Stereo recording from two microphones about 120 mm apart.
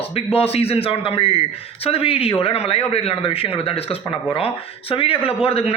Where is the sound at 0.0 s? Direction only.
55° left (ahead or behind).